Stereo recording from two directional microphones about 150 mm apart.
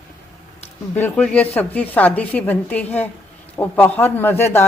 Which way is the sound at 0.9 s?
10° left (ahead or behind).